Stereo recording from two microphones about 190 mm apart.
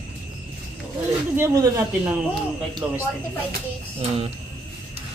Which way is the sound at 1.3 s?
15° right (ahead or behind).